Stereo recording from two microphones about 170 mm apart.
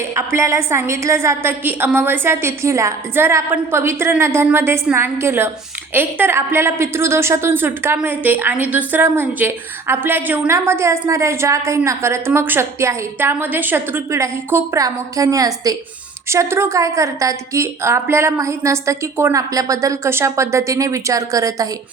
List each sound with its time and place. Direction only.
0.2 s a woman's voice: 15° right (ahead or behind)